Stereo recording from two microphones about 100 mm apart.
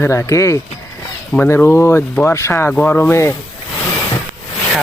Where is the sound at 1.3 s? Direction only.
20° left (ahead or behind).